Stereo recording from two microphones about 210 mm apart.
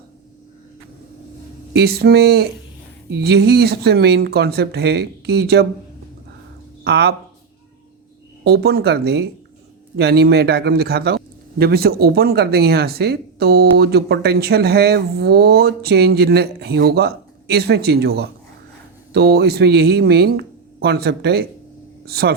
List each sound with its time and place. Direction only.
1.7 s a man's voice: 50° right (ahead or behind)
6.8 s speech: 50° right (ahead or behind)
8.4 s a man's voice: 50° right (ahead or behind)